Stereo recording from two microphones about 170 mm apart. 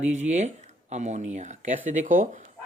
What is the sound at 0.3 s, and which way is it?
Speech, 40° right (ahead or behind).